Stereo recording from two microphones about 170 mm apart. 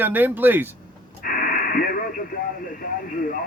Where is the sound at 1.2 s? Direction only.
55° left (ahead or behind).